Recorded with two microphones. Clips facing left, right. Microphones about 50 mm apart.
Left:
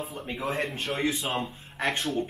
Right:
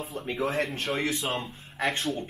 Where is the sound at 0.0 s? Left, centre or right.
Centre.